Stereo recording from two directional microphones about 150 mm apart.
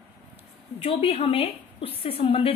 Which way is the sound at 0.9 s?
40° left (ahead or behind).